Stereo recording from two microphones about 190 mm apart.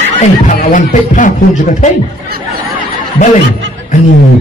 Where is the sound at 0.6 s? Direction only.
45° left (ahead or behind).